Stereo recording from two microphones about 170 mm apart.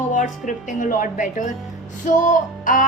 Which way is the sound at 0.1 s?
50° left (ahead or behind).